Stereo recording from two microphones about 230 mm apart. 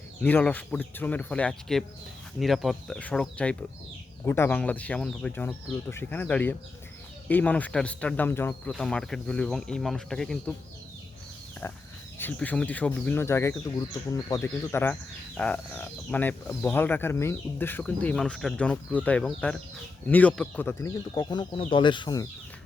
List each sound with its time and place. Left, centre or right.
0.2 s speech: centre
11.6 s speech: centre